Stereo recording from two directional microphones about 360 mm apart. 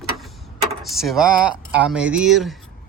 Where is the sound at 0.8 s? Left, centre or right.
Centre.